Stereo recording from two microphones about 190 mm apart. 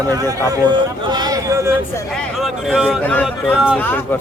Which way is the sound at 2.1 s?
Centre (ahead or behind).